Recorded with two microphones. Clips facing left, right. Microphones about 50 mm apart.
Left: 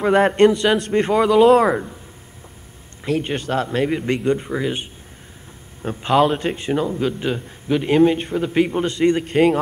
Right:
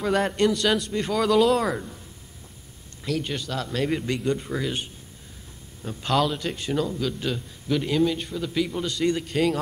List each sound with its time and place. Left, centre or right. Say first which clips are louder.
0.0 s speech: left 8 dB; left
0.7 s speech: left 8 dB; left
3.1 s a man's voice: left 7 dB; left
6.0 s a man's voice: left 7 dB; left